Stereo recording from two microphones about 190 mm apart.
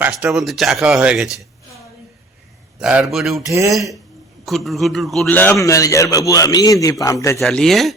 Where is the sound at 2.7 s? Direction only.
Centre (ahead or behind).